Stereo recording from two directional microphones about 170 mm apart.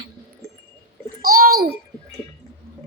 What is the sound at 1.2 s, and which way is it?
Babbling, 60° right (ahead or behind).